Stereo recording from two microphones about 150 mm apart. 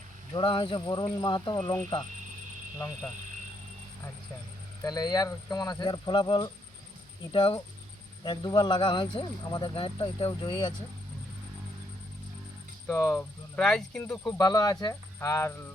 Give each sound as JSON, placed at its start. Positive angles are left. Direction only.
{"t": 0.3, "sound": "speech", "side_deg": 30}
{"t": 4.8, "sound": "speech", "side_deg": 25}
{"t": 12.9, "sound": "speech", "side_deg": 15}
{"t": 13.6, "sound": "speech", "side_deg": 5}
{"t": 14.3, "sound": "speech", "side_deg": 25}